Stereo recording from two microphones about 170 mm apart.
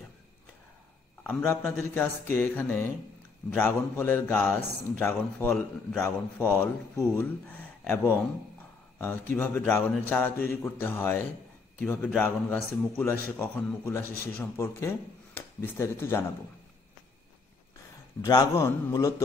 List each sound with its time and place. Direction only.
1.2 s a man's voice: 10° left (ahead or behind)
18.2 s a man's voice: 20° left (ahead or behind)